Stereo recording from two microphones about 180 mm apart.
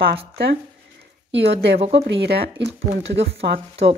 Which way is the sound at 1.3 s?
75° right (ahead or behind).